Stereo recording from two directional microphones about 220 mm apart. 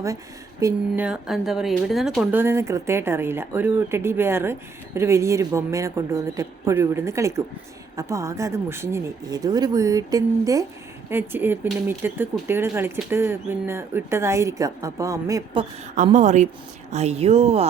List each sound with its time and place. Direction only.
0.6 s speech: 5° right (ahead or behind)
16.0 s a woman's voice: 30° right (ahead or behind)